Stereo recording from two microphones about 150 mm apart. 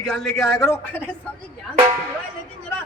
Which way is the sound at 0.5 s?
20° left (ahead or behind).